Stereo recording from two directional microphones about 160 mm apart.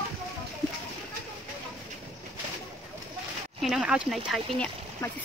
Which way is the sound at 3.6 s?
5° right (ahead or behind).